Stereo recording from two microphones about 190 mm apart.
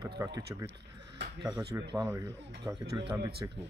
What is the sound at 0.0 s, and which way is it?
Speech, 20° right (ahead or behind).